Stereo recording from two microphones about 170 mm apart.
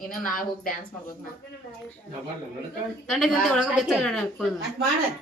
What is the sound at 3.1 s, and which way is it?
A woman's voice, centre (ahead or behind).